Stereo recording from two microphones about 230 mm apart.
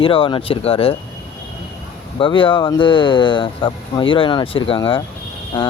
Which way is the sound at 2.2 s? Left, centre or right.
Left.